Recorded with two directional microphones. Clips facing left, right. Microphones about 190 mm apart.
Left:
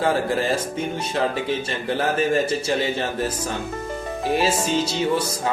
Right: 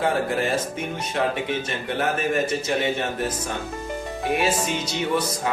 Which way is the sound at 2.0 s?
30° left (ahead or behind).